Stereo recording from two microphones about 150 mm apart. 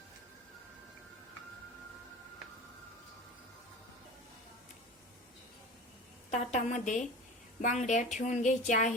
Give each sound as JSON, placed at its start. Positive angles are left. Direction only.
{"t": 6.3, "sound": "speech", "side_deg": 50}